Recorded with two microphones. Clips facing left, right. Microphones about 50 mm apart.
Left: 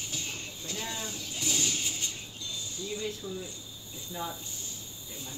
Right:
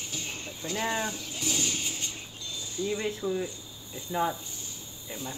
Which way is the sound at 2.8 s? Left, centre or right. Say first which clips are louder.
Right 7 dB; right.